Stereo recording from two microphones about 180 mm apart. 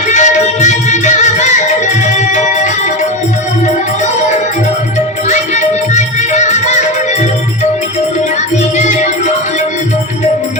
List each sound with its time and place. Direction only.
0.1 s music: 40° left (ahead or behind)
5.3 s music: 40° left (ahead or behind)